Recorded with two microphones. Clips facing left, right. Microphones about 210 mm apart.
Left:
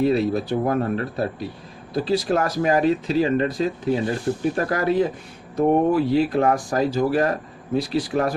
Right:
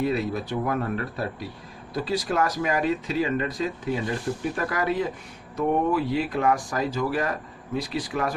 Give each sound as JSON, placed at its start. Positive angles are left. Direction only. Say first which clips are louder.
{"t": 0.0, "sound": "speech", "louder": "left 6 dB", "side_deg": 30}